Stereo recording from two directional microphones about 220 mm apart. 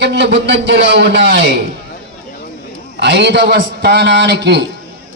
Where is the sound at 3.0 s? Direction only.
50° right (ahead or behind).